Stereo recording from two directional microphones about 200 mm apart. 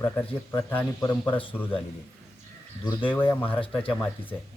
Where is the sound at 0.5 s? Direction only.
15° left (ahead or behind).